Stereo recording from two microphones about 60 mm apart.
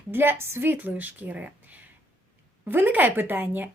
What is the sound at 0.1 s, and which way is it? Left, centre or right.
Speech, right.